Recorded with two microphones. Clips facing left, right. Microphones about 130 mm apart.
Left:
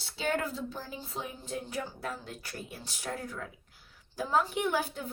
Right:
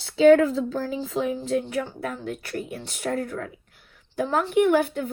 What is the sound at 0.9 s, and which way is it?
A woman's voice, 90° right.